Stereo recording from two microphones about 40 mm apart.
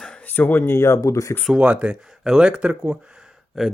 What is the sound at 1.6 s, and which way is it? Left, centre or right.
Speech, right.